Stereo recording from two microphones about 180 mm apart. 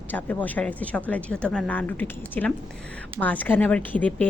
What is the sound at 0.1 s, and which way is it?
A woman's voice, 10° left (ahead or behind).